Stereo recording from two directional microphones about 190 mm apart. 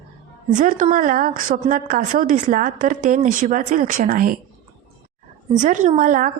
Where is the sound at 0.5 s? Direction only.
45° right (ahead or behind).